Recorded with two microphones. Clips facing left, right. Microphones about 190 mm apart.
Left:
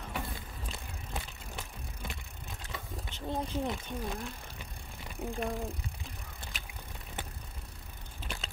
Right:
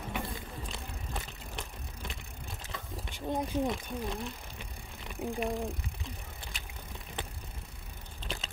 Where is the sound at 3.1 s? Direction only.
15° right (ahead or behind).